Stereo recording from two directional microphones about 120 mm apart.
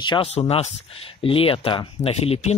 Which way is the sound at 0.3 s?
60° left (ahead or behind).